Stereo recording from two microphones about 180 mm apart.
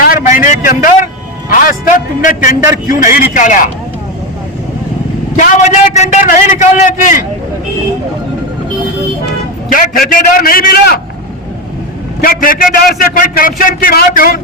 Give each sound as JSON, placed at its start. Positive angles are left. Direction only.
{"t": 0.0, "sound": "a sound", "side_deg": 50}
{"t": 1.5, "sound": "music", "side_deg": 50}
{"t": 3.1, "sound": "a man's voice", "side_deg": 45}
{"t": 5.4, "sound": "a man's voice", "side_deg": 40}
{"t": 9.7, "sound": "a man's voice", "side_deg": 50}
{"t": 12.2, "sound": "a man's voice", "side_deg": 55}